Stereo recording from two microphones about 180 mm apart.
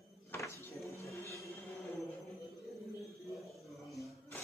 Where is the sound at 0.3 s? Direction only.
15° left (ahead or behind).